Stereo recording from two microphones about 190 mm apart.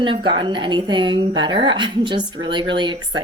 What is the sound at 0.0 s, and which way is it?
A woman's voice, 25° right (ahead or behind).